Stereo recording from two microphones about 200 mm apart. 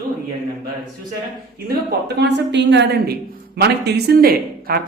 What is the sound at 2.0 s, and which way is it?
A woman's voice, 60° right (ahead or behind).